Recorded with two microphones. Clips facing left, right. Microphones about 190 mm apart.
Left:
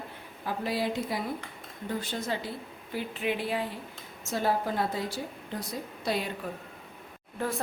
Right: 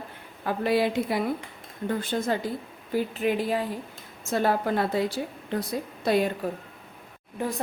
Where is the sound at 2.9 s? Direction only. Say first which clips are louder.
Right 6 dB; 40° right (ahead or behind).